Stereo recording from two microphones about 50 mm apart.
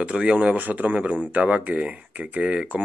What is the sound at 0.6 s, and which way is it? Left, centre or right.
Speech, right.